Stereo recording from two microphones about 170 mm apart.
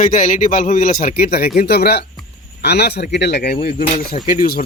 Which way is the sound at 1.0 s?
65° left (ahead or behind).